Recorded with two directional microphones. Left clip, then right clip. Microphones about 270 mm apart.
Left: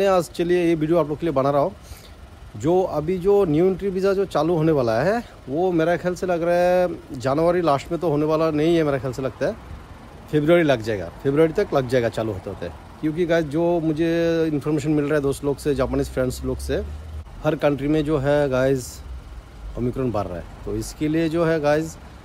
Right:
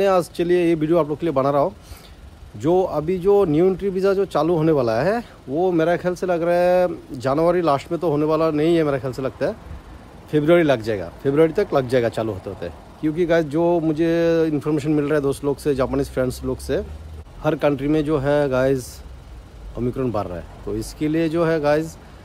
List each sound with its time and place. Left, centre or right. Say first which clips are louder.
0.0 s speech: right 1 dB; centre